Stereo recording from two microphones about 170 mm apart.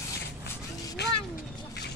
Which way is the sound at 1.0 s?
80° left.